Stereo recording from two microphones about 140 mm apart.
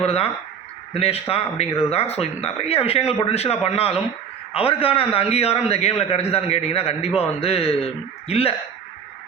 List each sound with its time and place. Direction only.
0.0 s speech: 45° left (ahead or behind)